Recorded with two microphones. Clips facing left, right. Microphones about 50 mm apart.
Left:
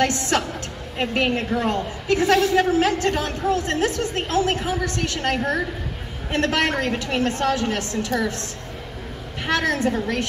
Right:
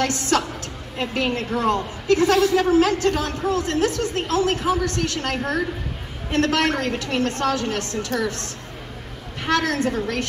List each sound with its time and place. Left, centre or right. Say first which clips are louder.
0.0 s a woman's voice: even; left
9.5 s a man's voice: even; left